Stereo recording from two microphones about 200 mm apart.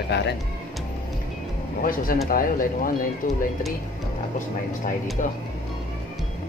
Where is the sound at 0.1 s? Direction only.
55° left (ahead or behind).